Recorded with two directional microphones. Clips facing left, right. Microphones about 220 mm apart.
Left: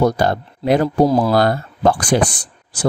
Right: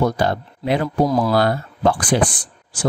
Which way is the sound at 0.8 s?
30° left (ahead or behind).